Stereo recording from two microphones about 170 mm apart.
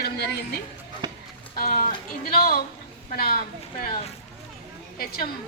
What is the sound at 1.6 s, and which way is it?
Speech, 55° left (ahead or behind).